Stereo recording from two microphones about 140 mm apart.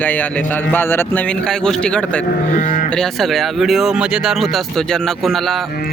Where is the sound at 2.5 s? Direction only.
70° left (ahead or behind).